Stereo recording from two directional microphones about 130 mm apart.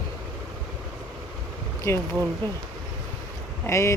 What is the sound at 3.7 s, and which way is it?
Speech, 20° left (ahead or behind).